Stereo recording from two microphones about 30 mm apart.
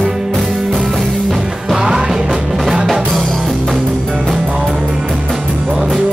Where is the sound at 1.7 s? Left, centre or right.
Centre.